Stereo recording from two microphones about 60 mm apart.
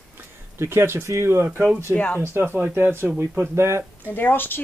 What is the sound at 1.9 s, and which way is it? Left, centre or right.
Speech, centre.